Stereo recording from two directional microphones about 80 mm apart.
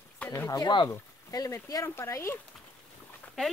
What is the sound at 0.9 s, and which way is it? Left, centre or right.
Speech, left.